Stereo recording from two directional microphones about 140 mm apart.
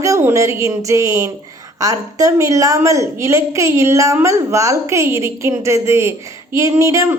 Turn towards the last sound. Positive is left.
turn(degrees=-20)  # may be behind; listen again after turning